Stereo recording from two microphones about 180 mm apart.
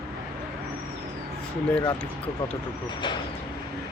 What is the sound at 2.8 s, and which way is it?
Speech, 25° left (ahead or behind).